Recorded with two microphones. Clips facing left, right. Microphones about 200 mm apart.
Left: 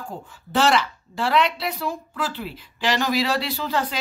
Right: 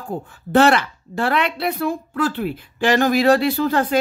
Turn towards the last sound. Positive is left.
turn(degrees=-50)  # may be behind; listen again after turning